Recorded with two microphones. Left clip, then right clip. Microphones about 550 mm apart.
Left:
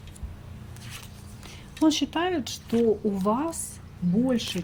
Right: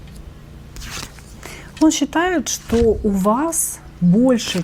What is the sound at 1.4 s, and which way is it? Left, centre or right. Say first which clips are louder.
Speech: right 8 dB; right.